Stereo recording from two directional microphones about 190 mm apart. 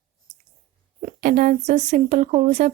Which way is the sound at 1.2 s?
45° right (ahead or behind).